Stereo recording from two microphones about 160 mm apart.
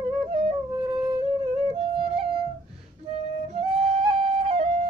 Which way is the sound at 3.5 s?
35° right (ahead or behind).